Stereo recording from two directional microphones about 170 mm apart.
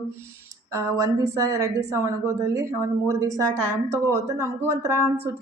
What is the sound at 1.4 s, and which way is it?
A woman's voice, 20° right (ahead or behind).